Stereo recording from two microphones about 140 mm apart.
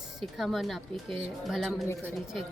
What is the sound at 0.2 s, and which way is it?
Speech, centre (ahead or behind).